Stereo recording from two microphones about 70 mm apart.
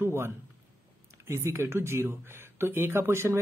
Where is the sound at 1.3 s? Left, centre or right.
Right.